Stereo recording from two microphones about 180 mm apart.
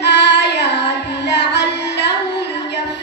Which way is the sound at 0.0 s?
70° left (ahead or behind).